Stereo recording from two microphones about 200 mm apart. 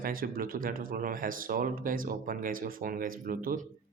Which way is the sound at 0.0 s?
45° right (ahead or behind).